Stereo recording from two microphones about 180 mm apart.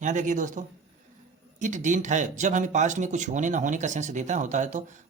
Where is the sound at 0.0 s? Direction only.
45° right (ahead or behind).